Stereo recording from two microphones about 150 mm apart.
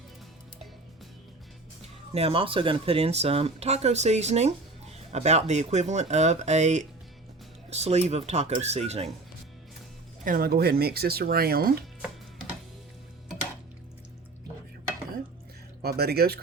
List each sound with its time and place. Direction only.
2.1 s speech: 40° right (ahead or behind)
10.2 s speech: 75° right (ahead or behind)
15.8 s speech: 90° right